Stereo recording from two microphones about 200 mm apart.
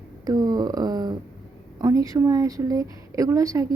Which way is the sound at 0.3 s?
20° right (ahead or behind).